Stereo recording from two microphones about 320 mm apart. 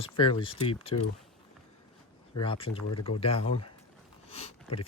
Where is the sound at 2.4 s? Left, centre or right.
Centre.